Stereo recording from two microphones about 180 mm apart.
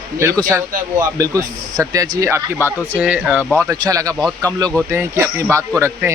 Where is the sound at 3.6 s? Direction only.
20° right (ahead or behind).